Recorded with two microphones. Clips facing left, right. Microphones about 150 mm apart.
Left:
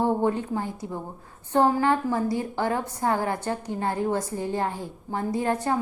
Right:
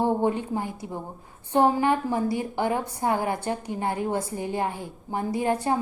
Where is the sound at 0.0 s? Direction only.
20° right (ahead or behind).